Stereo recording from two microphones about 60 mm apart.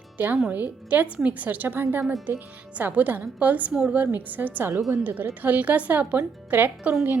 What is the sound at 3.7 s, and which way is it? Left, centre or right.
Speech, centre.